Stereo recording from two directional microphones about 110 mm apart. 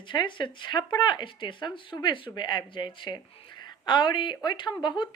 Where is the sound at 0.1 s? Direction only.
45° left (ahead or behind).